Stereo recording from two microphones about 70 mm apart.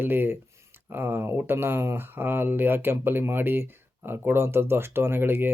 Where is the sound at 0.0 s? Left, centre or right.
Right.